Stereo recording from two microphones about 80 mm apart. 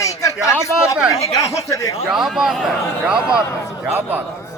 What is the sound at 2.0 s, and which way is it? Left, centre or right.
Speech, centre.